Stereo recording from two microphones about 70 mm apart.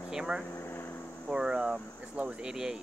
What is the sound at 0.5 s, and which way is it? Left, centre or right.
Air conditioning, left.